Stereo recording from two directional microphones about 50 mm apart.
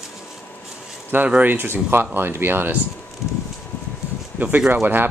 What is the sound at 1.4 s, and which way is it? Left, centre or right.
Speech, right.